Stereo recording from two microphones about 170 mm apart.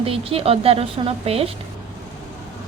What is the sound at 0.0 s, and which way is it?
Speech, 35° right (ahead or behind).